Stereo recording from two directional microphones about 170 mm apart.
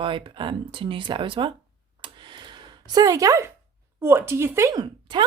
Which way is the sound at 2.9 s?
20° right (ahead or behind).